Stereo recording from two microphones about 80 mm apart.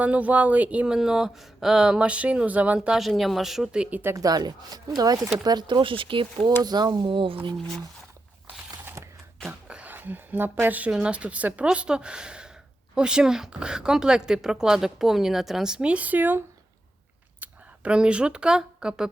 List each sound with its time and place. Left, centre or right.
0.0 s a woman's voice: centre
4.1 s speech: right
5.4 s speech: right
6.6 s speech: right
9.0 s a sound: right
9.5 s a woman's voice: centre
17.4 s speech: centre